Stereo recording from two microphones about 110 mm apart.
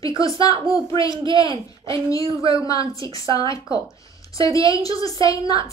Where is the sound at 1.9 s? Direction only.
30° left (ahead or behind).